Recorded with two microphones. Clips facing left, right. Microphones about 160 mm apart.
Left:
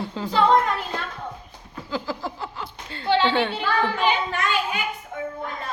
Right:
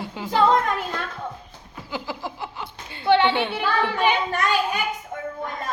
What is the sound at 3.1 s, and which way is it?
Child singing, 60° right (ahead or behind).